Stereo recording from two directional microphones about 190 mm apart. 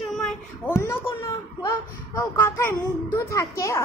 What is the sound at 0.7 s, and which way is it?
A child's voice, 15° left (ahead or behind).